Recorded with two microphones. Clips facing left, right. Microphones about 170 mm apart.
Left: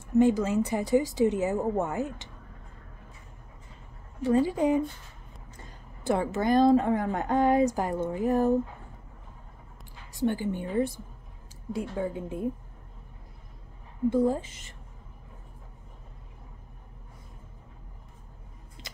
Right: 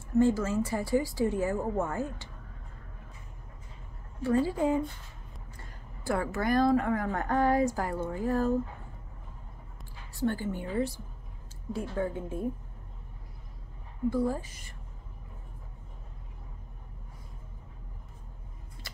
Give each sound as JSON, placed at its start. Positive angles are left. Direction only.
{"t": 0.2, "sound": "a woman's voice", "side_deg": 15}
{"t": 4.2, "sound": "a woman's voice", "side_deg": 20}
{"t": 10.1, "sound": "a woman's voice", "side_deg": 15}
{"t": 14.1, "sound": "a woman's voice", "side_deg": 20}